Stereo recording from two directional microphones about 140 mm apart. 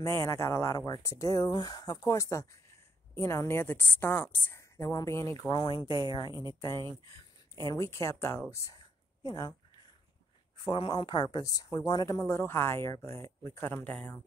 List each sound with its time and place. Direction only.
0.0 s a woman's voice: 20° left (ahead or behind)
6.6 s a woman's voice: 20° left (ahead or behind)
10.6 s a woman's voice: 35° left (ahead or behind); by 14.2 s 10° left (ahead or behind)